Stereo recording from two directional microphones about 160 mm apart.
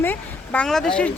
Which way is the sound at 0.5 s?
5° left (ahead or behind).